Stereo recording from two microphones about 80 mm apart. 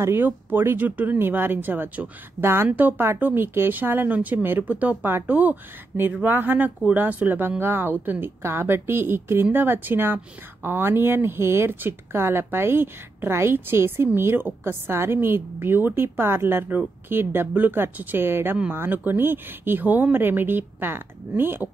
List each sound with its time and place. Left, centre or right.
0.0 s speech: right